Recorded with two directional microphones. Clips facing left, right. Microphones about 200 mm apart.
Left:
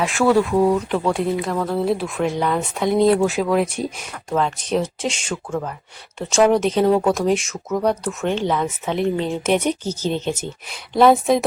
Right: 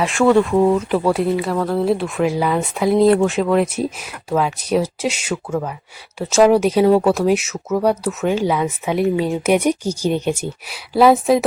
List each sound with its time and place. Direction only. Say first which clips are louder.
0.0 s speech: right 3 dB; centre (ahead or behind)